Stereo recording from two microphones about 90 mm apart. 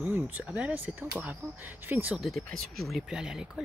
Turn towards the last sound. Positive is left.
turn(degrees=-5)  # may be behind; listen again after turning